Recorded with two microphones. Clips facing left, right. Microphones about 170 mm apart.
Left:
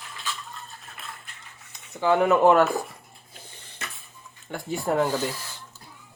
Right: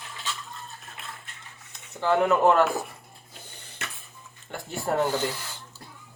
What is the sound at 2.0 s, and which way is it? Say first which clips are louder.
Speech: left 2 dB; 5° left (ahead or behind).